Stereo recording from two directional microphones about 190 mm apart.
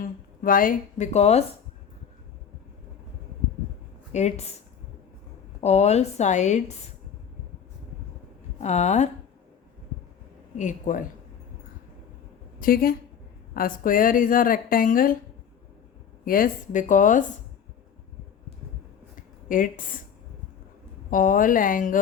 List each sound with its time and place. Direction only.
0.4 s a woman's voice: 45° left (ahead or behind)
4.1 s a woman's voice: 35° left (ahead or behind)
5.5 s a woman's voice: 35° left (ahead or behind)
8.6 s a woman's voice: 35° left (ahead or behind)
10.6 s speech: 40° left (ahead or behind)
12.5 s a woman's voice: 50° left (ahead or behind)
16.2 s speech: 50° left (ahead or behind)
19.5 s speech: 45° left (ahead or behind)
21.1 s speech: 45° left (ahead or behind)